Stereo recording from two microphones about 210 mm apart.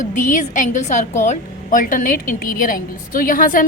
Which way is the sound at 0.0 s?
35° left (ahead or behind).